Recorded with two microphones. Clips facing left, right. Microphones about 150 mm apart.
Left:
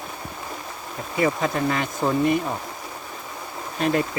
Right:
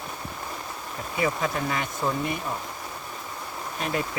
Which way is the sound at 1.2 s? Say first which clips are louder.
Left 5 dB; 45° left (ahead or behind).